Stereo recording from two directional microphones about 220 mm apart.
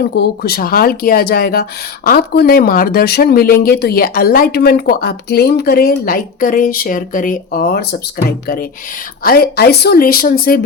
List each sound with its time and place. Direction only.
0.0 s speech: 45° left (ahead or behind)
9.2 s speech: 45° left (ahead or behind)